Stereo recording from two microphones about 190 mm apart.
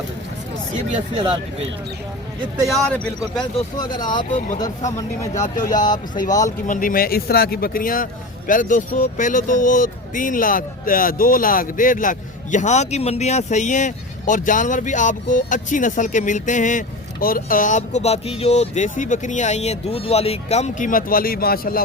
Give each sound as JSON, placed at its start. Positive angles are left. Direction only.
{"t": 1.1, "sound": "speech", "side_deg": -25}
{"t": 2.6, "sound": "speech", "side_deg": 5}
{"t": 3.8, "sound": "speech", "side_deg": 20}
{"t": 4.3, "sound": "speech", "side_deg": 40}